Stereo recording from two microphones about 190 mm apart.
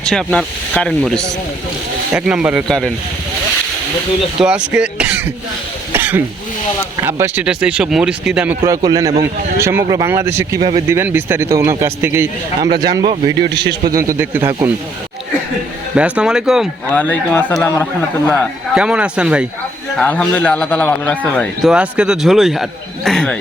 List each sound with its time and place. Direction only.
0.0 s a man's voice: 5° left (ahead or behind)
4.4 s speech: 5° right (ahead or behind)
5.9 s throat clearing: 10° right (ahead or behind)
7.0 s speech: 10° right (ahead or behind)
13.6 s a man's voice: 60° right (ahead or behind)
13.9 s speech: 15° right (ahead or behind)
16.0 s a man's voice: 5° right (ahead or behind)
16.9 s a man's voice: 5° left (ahead or behind)
18.7 s a man's voice: 5° right (ahead or behind)
20.0 s a man's voice: 5° left (ahead or behind)